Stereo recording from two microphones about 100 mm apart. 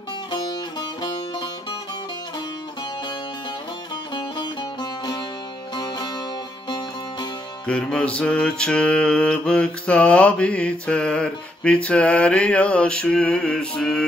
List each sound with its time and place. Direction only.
0.3 s music: 50° left (ahead or behind)
4.1 s music: 50° left (ahead or behind)
7.6 s mantra: 10° left (ahead or behind)